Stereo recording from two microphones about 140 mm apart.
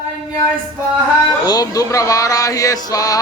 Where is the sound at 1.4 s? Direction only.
25° left (ahead or behind).